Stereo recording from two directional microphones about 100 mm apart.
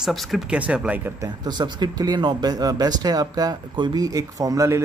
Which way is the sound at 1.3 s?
50° right (ahead or behind).